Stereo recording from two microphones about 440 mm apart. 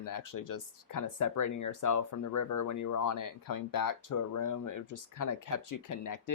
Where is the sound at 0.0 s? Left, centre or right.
Left.